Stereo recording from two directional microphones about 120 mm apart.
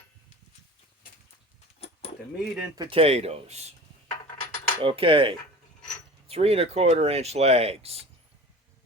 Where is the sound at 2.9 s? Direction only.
55° right (ahead or behind).